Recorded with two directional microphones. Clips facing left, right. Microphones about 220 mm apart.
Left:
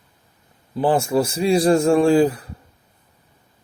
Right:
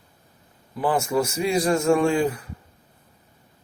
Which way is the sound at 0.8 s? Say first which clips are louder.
Left 4 dB; 30° left (ahead or behind).